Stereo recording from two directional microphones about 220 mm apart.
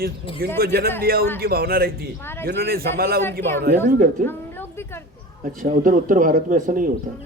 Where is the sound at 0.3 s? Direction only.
45° right (ahead or behind).